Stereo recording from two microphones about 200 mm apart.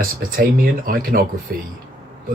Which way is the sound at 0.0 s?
45° right (ahead or behind).